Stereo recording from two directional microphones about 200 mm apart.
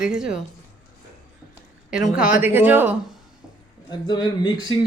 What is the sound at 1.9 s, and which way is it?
A woman's voice, 5° right (ahead or behind).